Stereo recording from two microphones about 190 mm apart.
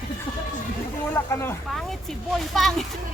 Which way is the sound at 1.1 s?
10° left (ahead or behind).